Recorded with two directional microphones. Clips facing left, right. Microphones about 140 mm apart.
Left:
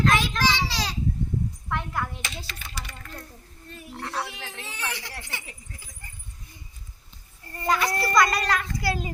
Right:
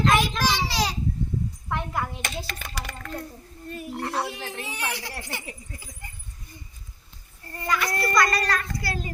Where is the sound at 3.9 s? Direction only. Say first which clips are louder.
Right 3 dB; 15° right (ahead or behind).